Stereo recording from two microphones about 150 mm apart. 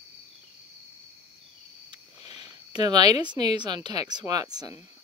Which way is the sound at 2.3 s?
30° right (ahead or behind).